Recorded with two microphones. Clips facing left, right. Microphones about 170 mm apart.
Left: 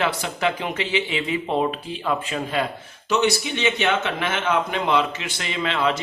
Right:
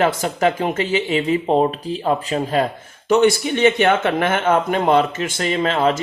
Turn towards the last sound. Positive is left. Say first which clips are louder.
# right 5 dB
turn(degrees=-45)  # may be behind; listen again after turning